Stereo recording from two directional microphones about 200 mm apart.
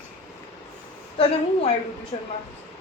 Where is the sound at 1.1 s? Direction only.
30° left (ahead or behind).